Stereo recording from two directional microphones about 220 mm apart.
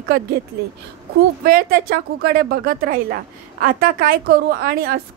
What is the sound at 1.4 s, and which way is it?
Speech, 40° right (ahead or behind).